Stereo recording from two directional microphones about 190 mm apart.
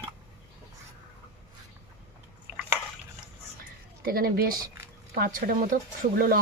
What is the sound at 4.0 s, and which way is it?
Speech, 50° right (ahead or behind).